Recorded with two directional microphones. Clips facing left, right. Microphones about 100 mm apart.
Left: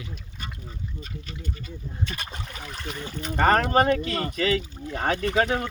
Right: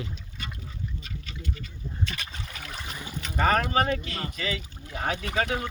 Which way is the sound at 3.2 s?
45° left (ahead or behind).